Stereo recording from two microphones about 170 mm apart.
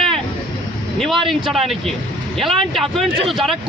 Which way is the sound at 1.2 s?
30° right (ahead or behind).